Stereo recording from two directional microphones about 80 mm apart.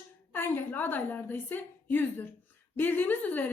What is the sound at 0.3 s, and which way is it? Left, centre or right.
A woman's voice, left.